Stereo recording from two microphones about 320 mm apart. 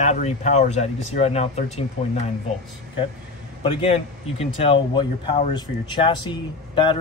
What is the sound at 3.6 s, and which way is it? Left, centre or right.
Speech, centre.